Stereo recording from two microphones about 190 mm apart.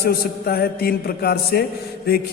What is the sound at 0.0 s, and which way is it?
A man's voice, 55° left (ahead or behind).